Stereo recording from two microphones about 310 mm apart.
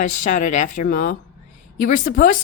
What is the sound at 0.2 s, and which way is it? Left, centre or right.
A woman's voice, left.